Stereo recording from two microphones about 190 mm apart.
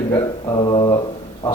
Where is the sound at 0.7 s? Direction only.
20° left (ahead or behind).